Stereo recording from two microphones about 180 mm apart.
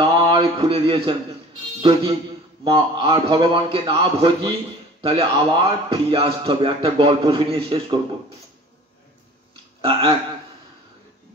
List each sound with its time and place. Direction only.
0.2 s a man's voice: 30° right (ahead or behind)
9.8 s speech: 30° right (ahead or behind)